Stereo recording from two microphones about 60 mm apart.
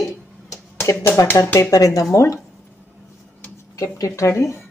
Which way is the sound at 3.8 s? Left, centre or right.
Left.